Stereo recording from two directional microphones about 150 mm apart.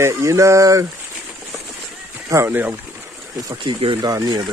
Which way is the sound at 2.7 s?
15° right (ahead or behind).